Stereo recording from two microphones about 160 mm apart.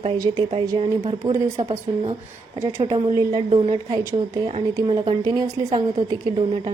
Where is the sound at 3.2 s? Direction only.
30° right (ahead or behind).